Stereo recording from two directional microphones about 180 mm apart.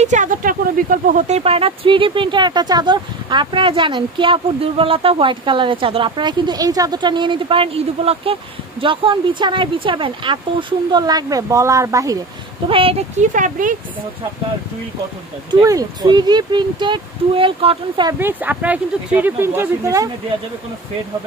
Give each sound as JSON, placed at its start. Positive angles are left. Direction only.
{"t": 0.0, "sound": "speech", "side_deg": -45}
{"t": 12.6, "sound": "speech", "side_deg": -30}
{"t": 13.2, "sound": "speech", "side_deg": -45}
{"t": 15.6, "sound": "speech", "side_deg": -20}
{"t": 18.2, "sound": "speech", "side_deg": -10}